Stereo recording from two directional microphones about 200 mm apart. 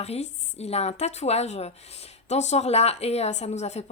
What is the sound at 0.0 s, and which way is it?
Speech, 30° left (ahead or behind).